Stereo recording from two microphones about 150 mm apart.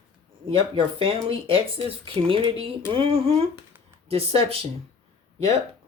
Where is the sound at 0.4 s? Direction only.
35° right (ahead or behind).